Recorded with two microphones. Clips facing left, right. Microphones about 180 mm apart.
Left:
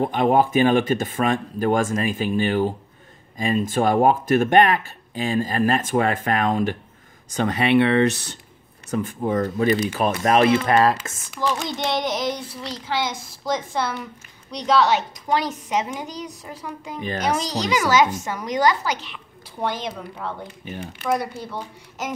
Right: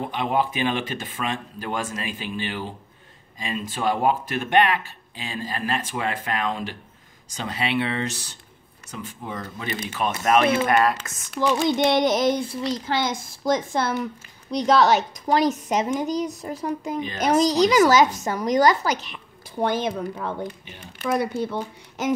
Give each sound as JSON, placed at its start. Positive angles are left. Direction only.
{"t": 0.0, "sound": "speech", "side_deg": 45}
{"t": 8.9, "sound": "speech", "side_deg": 50}
{"t": 9.8, "sound": "speech", "side_deg": 35}
{"t": 11.8, "sound": "a woman's voice", "side_deg": -55}
{"t": 20.6, "sound": "speech", "side_deg": 50}
{"t": 21.0, "sound": "a woman's voice", "side_deg": -50}